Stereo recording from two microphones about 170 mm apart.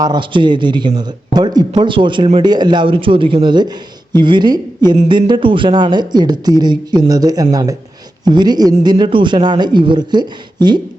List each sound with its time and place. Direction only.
0.0 s speech: 25° right (ahead or behind)